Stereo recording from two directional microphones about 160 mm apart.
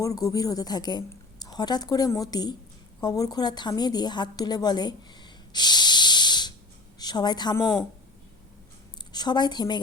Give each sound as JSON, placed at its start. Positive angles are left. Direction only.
{"t": 0.0, "sound": "a woman's voice", "side_deg": 20}
{"t": 9.1, "sound": "a woman's voice", "side_deg": 25}